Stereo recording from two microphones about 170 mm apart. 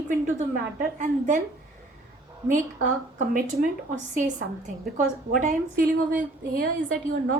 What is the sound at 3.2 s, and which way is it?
A woman's voice, 50° right (ahead or behind).